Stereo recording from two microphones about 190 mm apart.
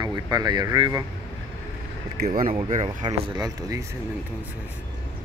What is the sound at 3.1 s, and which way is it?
Speech, 20° right (ahead or behind).